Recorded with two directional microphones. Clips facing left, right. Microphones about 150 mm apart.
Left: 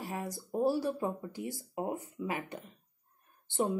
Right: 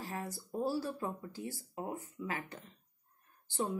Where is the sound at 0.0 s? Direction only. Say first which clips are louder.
Left 3 dB; 15° left (ahead or behind).